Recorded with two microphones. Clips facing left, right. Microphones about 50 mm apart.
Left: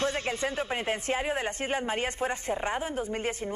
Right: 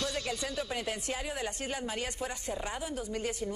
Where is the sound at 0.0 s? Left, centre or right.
Left.